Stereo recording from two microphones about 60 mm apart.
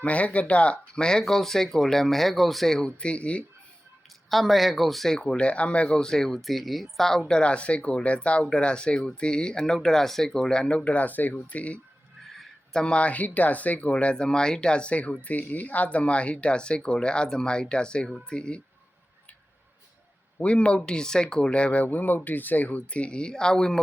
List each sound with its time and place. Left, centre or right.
0.0 s speech: left
4.3 s speech: centre
20.4 s speech: centre